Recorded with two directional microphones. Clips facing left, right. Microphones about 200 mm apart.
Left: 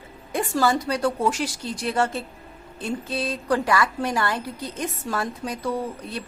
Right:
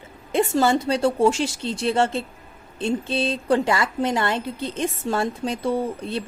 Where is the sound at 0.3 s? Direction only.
25° right (ahead or behind).